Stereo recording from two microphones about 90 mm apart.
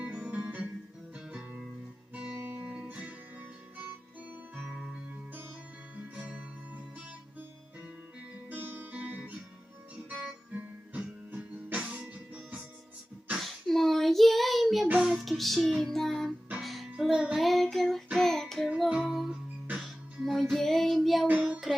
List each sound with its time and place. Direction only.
0.0 s music: 15° right (ahead or behind)
2.1 s guitar: 25° right (ahead or behind)
4.3 s music: 20° right (ahead or behind)
4.7 s music: 5° right (ahead or behind)
6.1 s music: 15° right (ahead or behind)
8.4 s music: 20° right (ahead or behind)
10.1 s guitar: 15° right (ahead or behind)
10.9 s music: 15° right (ahead or behind)
13.3 s child singing: centre (ahead or behind)
14.9 s music: 5° right (ahead or behind)
21.2 s child singing: 15° right (ahead or behind)